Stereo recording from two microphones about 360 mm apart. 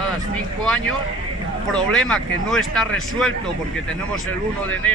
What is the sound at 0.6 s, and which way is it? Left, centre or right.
Speech, centre.